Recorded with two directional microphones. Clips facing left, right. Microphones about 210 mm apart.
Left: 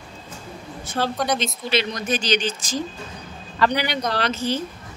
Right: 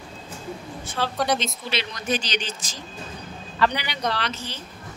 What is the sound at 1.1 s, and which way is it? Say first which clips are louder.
Speech: left 1 dB; centre (ahead or behind).